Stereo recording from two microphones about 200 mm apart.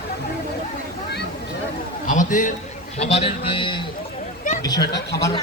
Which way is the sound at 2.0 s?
40° left (ahead or behind).